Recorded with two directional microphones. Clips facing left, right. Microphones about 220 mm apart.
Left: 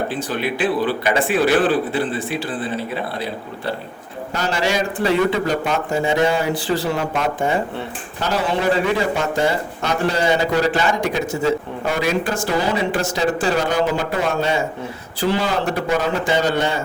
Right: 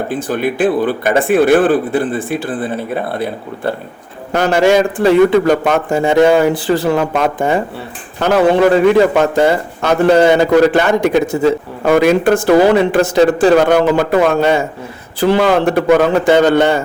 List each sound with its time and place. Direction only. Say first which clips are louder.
0.1 s speech: right 6 dB; 50° right (ahead or behind)